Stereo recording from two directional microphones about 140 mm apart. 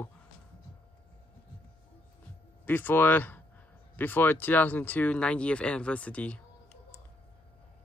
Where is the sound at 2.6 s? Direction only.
15° left (ahead or behind).